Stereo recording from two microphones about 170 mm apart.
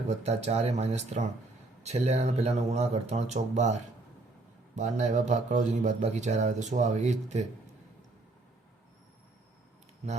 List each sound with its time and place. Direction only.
0.1 s a man's voice: 40° right (ahead or behind)